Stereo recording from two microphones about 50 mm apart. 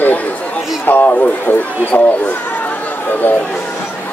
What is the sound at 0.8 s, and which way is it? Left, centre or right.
Speech, left.